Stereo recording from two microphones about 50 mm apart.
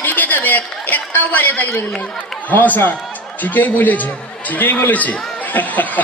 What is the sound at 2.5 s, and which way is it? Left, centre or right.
A man's voice, left.